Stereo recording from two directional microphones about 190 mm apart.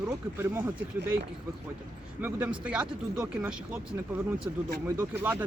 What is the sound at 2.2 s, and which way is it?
Speech, 10° right (ahead or behind).